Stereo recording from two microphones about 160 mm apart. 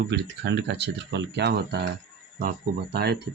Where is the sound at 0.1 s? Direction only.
90° right.